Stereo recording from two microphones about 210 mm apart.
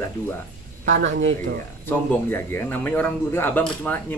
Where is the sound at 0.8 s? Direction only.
65° right (ahead or behind).